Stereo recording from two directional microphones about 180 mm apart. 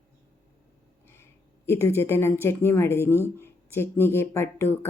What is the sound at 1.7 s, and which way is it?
Speech, 15° left (ahead or behind).